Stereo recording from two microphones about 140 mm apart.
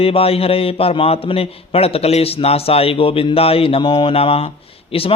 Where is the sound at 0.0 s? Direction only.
45° left (ahead or behind).